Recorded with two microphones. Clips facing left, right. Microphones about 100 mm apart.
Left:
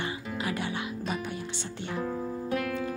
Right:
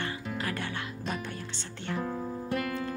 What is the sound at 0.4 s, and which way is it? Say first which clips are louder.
Music: left 4 dB; 15° left (ahead or behind).